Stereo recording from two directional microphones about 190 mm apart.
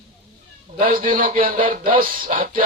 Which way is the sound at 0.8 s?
45° right (ahead or behind).